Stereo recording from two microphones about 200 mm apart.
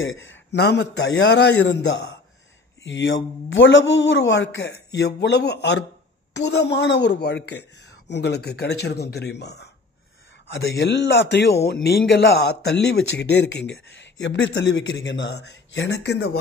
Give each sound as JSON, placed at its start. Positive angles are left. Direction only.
{"t": 0.0, "sound": "speech", "side_deg": 70}